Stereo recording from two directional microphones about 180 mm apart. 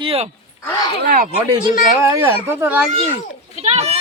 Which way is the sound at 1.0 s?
55° right (ahead or behind).